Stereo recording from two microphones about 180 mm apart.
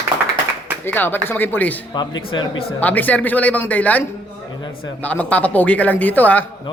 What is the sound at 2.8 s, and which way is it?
A man's voice, 10° left (ahead or behind).